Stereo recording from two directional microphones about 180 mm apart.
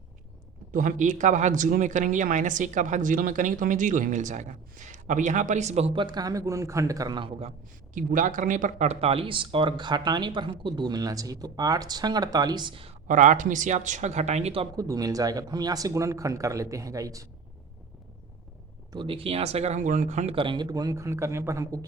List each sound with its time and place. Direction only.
0.7 s speech: 45° right (ahead or behind); by 7.3 s 20° right (ahead or behind)
7.9 s speech: 45° right (ahead or behind); by 13.0 s 30° right (ahead or behind)
13.1 s speech: 45° right (ahead or behind)
14.8 s speech: 20° right (ahead or behind)
18.9 s speech: 25° right (ahead or behind)